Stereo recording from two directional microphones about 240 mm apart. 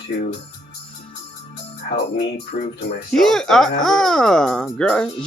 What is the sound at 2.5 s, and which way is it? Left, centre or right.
Speech, left.